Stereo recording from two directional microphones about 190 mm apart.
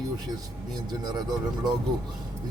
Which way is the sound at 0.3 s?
20° right (ahead or behind).